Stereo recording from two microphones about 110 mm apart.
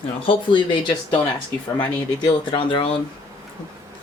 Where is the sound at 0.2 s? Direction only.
50° left (ahead or behind).